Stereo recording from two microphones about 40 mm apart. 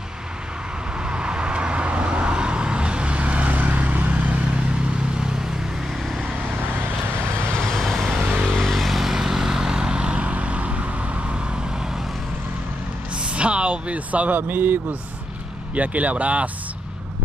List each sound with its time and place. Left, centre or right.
0.9 s vehicle: right
7.8 s vehicle: centre
9.1 s vehicle: centre
13.1 s vehicle: right
14.5 s speech: right
15.7 s speech: right